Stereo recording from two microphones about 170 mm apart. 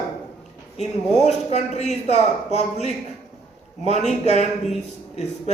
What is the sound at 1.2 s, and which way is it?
Speech, 40° left (ahead or behind).